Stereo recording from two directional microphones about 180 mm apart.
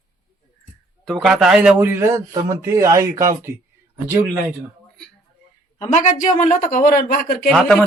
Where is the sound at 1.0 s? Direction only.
Centre (ahead or behind).